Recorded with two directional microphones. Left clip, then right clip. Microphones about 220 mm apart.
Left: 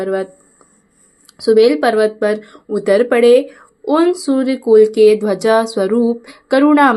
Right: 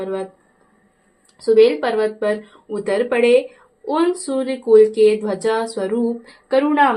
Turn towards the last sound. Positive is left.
turn(degrees=25)  # may be behind; listen again after turning